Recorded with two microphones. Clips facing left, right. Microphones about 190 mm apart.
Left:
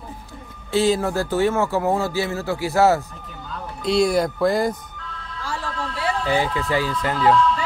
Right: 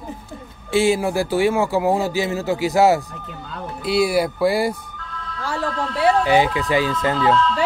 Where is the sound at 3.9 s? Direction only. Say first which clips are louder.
Even; 5° right (ahead or behind).